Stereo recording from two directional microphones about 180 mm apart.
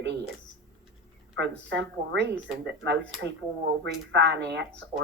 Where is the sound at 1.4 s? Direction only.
70° right (ahead or behind).